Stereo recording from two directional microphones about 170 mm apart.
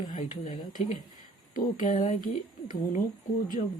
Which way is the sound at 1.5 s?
55° left (ahead or behind).